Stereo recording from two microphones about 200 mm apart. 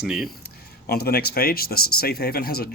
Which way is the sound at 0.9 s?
50° left (ahead or behind).